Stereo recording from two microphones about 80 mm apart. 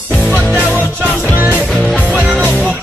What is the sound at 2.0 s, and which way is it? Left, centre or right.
Music, centre.